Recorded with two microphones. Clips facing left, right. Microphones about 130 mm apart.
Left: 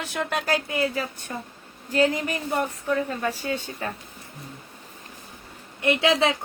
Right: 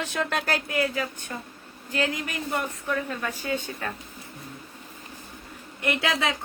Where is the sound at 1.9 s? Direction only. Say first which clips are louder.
Left 6 dB; 35° left (ahead or behind).